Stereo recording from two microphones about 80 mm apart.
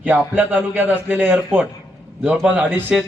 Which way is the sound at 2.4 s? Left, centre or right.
Centre.